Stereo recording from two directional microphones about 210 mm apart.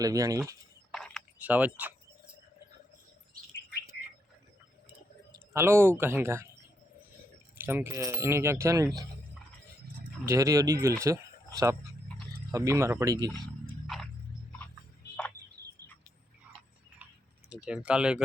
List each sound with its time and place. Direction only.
0.0 s speech: 15° right (ahead or behind)
0.9 s a sound: centre (ahead or behind)
5.3 s speech: 10° right (ahead or behind)
7.6 s speech: 10° right (ahead or behind)
10.2 s speech: 15° right (ahead or behind)
12.5 s speech: 15° right (ahead or behind)
13.3 s a sound: centre (ahead or behind)
17.5 s speech: 5° right (ahead or behind)